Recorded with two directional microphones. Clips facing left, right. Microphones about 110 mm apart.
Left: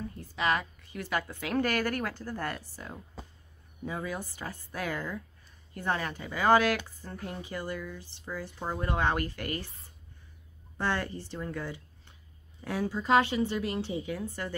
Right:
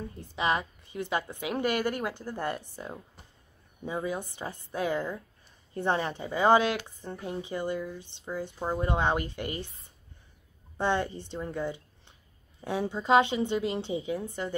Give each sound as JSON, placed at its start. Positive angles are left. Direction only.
{"t": 0.2, "sound": "speech", "side_deg": -20}
{"t": 10.8, "sound": "speech", "side_deg": -20}